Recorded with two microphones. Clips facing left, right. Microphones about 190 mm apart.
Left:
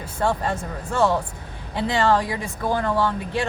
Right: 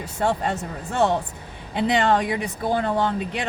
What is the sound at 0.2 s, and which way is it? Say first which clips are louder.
Speech: even; 20° right (ahead or behind).